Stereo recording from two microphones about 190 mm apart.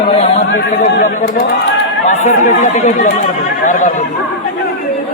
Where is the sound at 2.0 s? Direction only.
40° left (ahead or behind).